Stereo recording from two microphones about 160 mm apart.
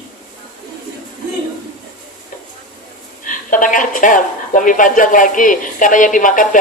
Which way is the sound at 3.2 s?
55° left (ahead or behind).